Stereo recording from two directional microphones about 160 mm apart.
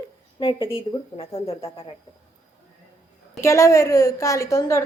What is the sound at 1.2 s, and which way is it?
Speech, 40° left (ahead or behind).